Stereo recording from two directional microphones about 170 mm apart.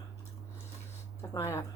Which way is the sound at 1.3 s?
15° left (ahead or behind).